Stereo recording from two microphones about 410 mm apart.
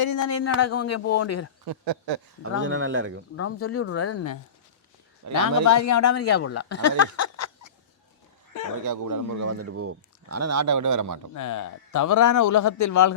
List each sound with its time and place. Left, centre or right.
0.0 s speech: left
1.6 s speech: right
2.4 s speech: right
3.3 s speech: left
5.2 s speech: right
5.6 s speech: left
8.8 s speech: right
11.3 s a man's voice: left